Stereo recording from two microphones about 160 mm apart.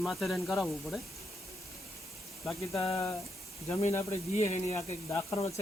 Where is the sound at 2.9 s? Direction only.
20° left (ahead or behind).